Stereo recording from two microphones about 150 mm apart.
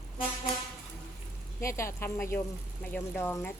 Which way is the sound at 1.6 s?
20° left (ahead or behind).